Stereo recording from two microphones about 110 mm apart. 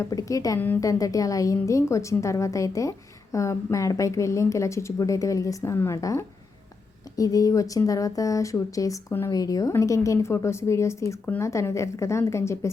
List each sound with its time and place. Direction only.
0.0 s a woman's voice: 30° left (ahead or behind)